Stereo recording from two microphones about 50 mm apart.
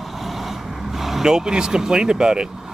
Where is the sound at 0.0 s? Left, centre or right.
Centre.